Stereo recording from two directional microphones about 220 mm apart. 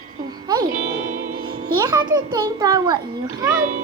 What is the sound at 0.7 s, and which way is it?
Music, 40° right (ahead or behind).